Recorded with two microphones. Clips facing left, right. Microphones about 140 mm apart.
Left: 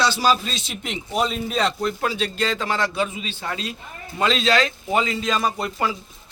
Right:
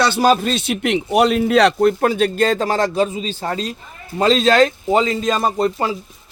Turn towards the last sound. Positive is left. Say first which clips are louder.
# right 6 dB
turn(degrees=-30)  # may be behind; listen again after turning